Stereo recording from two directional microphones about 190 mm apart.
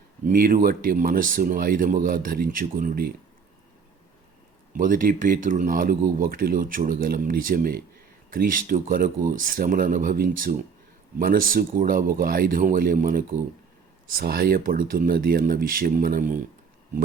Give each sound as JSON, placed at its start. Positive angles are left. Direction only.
{"t": 0.3, "sound": "speech", "side_deg": -50}
{"t": 4.7, "sound": "speech", "side_deg": -45}